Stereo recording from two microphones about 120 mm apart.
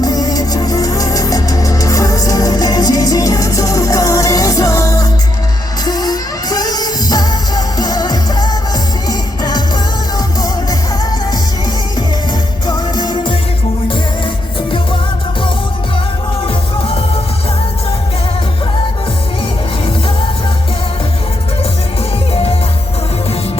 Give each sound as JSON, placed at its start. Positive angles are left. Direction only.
{"t": 0.0, "sound": "music", "side_deg": 30}
{"t": 12.6, "sound": "music", "side_deg": 35}